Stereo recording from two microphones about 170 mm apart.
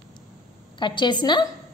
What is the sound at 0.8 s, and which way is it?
Speech, 25° left (ahead or behind).